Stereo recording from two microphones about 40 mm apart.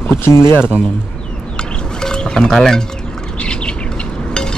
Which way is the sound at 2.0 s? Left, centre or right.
Centre.